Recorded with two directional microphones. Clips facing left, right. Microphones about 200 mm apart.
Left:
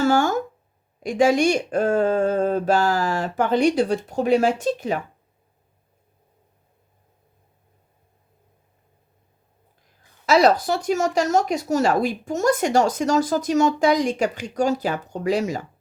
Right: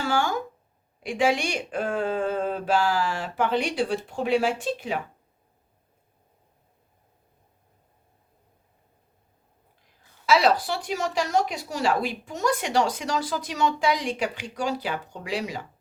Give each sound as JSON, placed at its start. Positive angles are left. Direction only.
{"t": 0.0, "sound": "a sound", "side_deg": 45}
{"t": 0.9, "sound": "speech", "side_deg": 40}
{"t": 10.2, "sound": "speech", "side_deg": 45}